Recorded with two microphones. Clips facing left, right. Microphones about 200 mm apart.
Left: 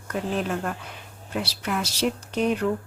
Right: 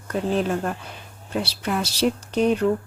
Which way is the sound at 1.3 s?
30° right (ahead or behind).